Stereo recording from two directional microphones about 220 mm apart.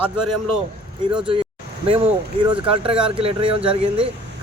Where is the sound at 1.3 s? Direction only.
25° right (ahead or behind).